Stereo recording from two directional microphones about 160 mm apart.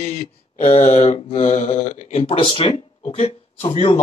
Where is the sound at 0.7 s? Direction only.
40° left (ahead or behind).